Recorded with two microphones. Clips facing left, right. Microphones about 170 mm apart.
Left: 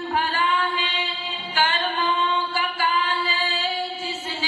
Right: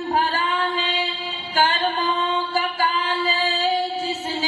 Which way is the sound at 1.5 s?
40° right (ahead or behind).